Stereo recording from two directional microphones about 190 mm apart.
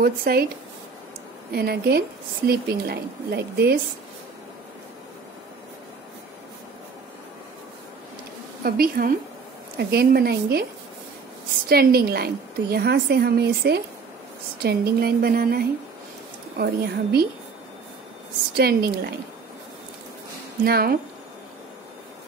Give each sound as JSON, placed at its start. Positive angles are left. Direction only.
{"t": 0.0, "sound": "speech", "side_deg": -55}
{"t": 1.5, "sound": "a woman's voice", "side_deg": -55}
{"t": 8.6, "sound": "a woman's voice", "side_deg": -50}
{"t": 11.7, "sound": "a woman's voice", "side_deg": -55}
{"t": 18.6, "sound": "speech", "side_deg": -55}
{"t": 20.6, "sound": "speech", "side_deg": -55}